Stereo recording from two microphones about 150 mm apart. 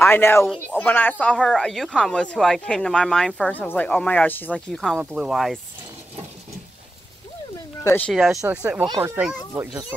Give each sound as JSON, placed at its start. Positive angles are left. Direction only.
{"t": 0.0, "sound": "a woman's voice", "side_deg": 15}
{"t": 4.7, "sound": "a woman's voice", "side_deg": 0}
{"t": 8.1, "sound": "a woman's voice", "side_deg": 0}
{"t": 8.4, "sound": "speech", "side_deg": -10}